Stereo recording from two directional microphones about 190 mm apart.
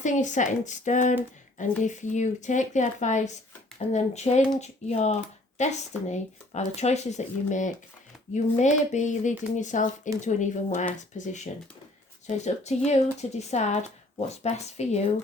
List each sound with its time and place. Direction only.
0.0 s speech: 40° left (ahead or behind)